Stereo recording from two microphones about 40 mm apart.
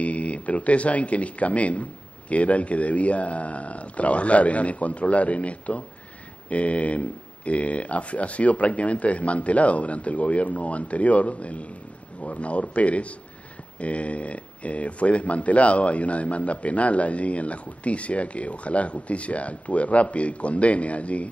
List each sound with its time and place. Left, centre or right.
0.0 s speech: left